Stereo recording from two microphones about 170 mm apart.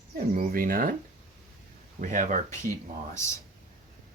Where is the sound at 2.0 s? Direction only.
50° right (ahead or behind).